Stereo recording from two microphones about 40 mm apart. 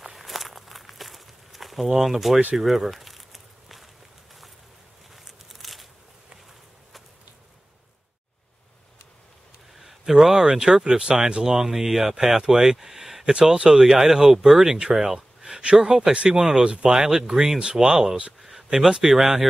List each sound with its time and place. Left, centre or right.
0.0 s walk: centre
2.0 s speech: centre
2.5 s a sound: centre
5.1 s a sound: centre
9.8 s speech: centre
13.3 s speech: centre
13.7 s speech: centre
16.6 s speech: right
16.9 s speech: centre
18.7 s speech: right
19.0 s speech: centre